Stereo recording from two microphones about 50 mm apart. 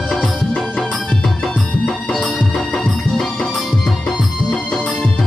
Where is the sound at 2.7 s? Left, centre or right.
Centre.